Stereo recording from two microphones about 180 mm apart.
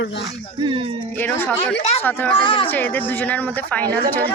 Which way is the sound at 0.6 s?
30° right (ahead or behind).